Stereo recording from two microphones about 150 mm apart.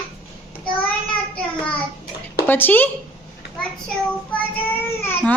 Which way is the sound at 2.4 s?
10° left (ahead or behind).